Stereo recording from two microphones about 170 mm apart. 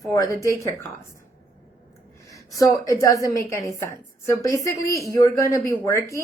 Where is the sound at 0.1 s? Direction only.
20° left (ahead or behind).